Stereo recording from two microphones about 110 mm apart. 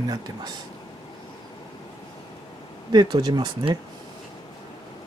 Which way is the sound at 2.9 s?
40° right (ahead or behind).